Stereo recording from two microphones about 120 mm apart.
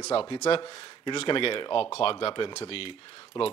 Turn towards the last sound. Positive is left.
turn(degrees=50)  # may be behind; listen again after turning